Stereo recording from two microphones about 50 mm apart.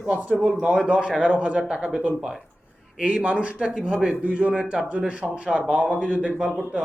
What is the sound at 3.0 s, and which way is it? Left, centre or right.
Speech, right.